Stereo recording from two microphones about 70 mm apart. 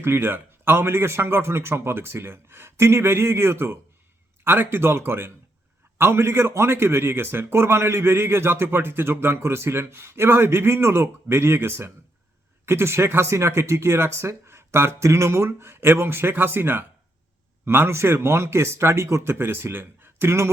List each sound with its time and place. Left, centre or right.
0.0 s a man's voice: right